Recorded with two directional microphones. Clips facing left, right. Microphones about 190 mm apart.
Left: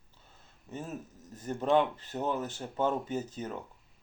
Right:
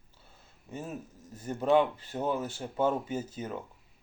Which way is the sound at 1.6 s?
10° right (ahead or behind).